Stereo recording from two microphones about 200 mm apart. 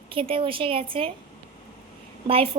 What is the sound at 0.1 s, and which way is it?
A woman's voice, 25° right (ahead or behind).